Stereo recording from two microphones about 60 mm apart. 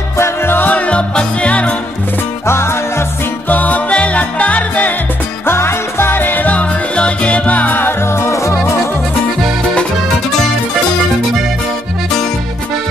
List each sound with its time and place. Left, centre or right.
0.2 s music: left
2.4 s music: left
3.4 s music: left
5.5 s music: left
8.1 s music: left